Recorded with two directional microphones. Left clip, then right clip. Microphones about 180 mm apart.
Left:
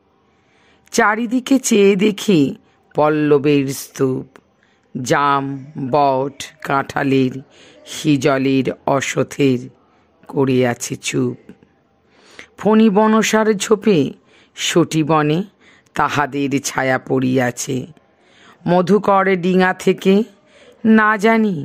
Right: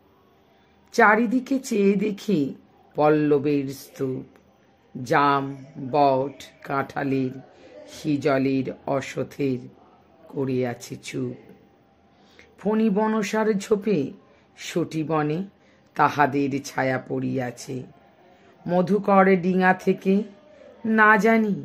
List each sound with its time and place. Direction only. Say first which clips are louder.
0.8 s speech: left 2 dB; 45° left (ahead or behind)
12.3 s a man's voice: left 10 dB; 45° left (ahead or behind)